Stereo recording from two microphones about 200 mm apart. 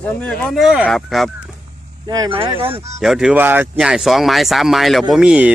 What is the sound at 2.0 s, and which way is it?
Speech, 20° right (ahead or behind).